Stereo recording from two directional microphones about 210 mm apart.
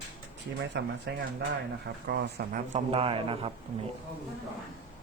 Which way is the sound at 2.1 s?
55° right (ahead or behind).